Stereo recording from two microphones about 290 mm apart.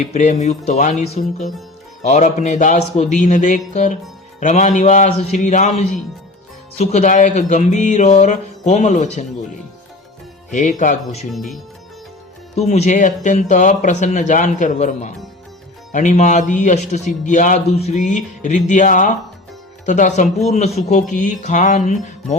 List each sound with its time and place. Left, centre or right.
0.1 s speech: left
10.5 s speech: left
11.3 s speech: centre
12.5 s speech: left